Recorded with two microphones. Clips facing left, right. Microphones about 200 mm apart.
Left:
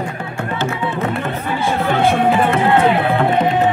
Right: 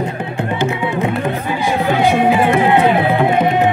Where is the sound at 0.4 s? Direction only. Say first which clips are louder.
Right 3 dB; 20° right (ahead or behind).